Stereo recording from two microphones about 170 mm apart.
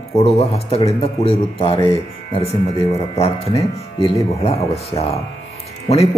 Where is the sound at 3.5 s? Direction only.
35° left (ahead or behind).